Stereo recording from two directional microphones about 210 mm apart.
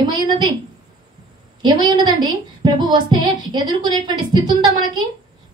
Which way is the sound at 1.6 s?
20° right (ahead or behind).